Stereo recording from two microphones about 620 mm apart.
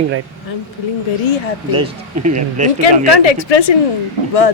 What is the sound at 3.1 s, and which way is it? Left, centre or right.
Speech, left.